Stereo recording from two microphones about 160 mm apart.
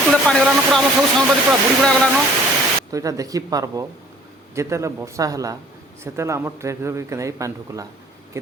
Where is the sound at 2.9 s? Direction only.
20° right (ahead or behind).